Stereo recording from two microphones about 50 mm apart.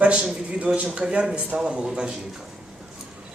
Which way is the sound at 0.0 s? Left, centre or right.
Right.